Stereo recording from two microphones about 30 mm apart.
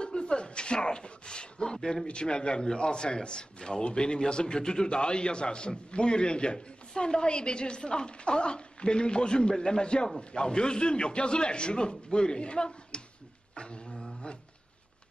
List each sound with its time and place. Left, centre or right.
0.0 s a sound: left
2.0 s a man's voice: left
13.6 s dog: left